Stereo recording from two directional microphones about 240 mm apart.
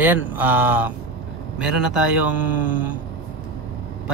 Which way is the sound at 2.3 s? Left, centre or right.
Left.